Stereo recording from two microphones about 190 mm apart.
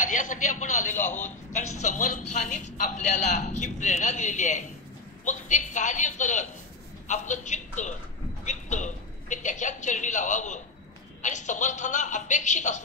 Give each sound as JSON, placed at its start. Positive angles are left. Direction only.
{"t": 0.0, "sound": "a man's voice", "side_deg": 45}